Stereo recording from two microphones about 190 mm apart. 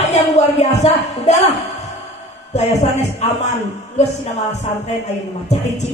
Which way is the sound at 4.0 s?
35° left (ahead or behind).